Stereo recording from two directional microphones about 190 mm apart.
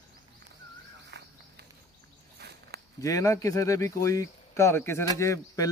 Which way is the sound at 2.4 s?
60° right (ahead or behind).